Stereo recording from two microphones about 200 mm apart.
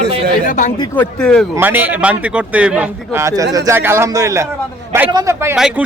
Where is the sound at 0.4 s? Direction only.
40° left (ahead or behind).